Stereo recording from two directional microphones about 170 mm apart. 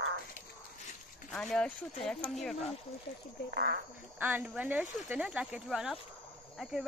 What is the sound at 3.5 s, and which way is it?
Speech, 80° right.